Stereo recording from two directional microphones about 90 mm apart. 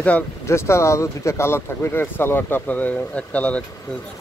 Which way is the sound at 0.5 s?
30° left (ahead or behind).